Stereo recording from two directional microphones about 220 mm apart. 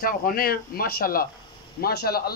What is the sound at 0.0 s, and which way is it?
A man's voice, 40° left (ahead or behind).